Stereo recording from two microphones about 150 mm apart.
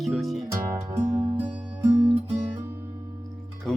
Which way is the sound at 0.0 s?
Centre (ahead or behind).